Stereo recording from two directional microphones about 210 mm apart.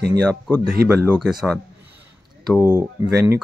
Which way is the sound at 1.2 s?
Centre (ahead or behind).